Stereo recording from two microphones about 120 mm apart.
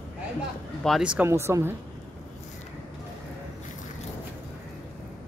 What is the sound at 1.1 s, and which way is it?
Speech, 20° right (ahead or behind).